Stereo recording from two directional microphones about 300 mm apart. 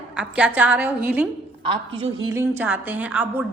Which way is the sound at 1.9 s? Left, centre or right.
Centre.